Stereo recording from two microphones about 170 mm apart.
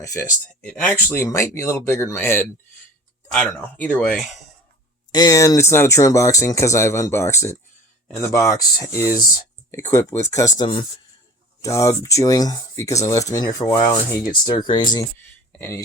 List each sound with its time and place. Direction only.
0.0 s speech: 20° left (ahead or behind)
0.6 s speech: 10° left (ahead or behind)
5.1 s speech: 20° left (ahead or behind)
15.5 s speech: 15° left (ahead or behind)